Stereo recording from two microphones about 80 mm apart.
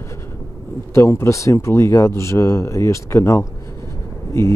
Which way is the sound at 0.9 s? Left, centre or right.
Left.